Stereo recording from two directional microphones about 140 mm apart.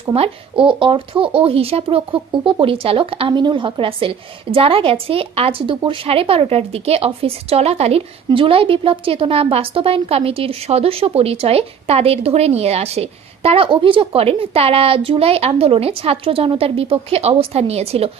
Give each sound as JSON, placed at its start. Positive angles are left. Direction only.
{"t": 0.1, "sound": "speech", "side_deg": -40}